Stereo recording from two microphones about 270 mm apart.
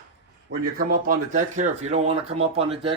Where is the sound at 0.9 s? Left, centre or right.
Right.